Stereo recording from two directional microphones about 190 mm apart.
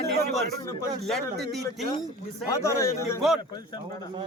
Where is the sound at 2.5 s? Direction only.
15° left (ahead or behind).